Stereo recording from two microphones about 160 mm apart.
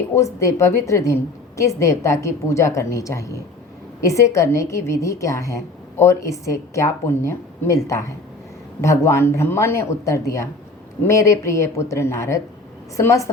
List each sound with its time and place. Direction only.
0.2 s a woman's voice: 20° left (ahead or behind)